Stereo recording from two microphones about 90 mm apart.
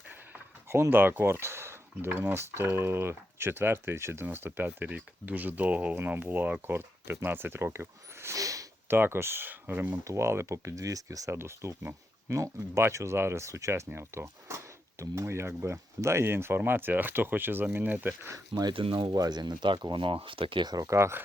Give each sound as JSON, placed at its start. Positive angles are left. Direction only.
{"t": 0.7, "sound": "speech", "side_deg": -25}
{"t": 8.9, "sound": "speech", "side_deg": -25}
{"t": 10.0, "sound": "speech", "side_deg": -35}
{"t": 11.3, "sound": "speech", "side_deg": -30}
{"t": 18.7, "sound": "speech", "side_deg": -75}
{"t": 19.1, "sound": "speech", "side_deg": -50}
{"t": 20.8, "sound": "speech", "side_deg": -30}